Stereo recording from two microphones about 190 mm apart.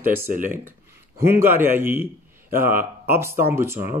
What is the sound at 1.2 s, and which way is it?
Speech, 10° right (ahead or behind).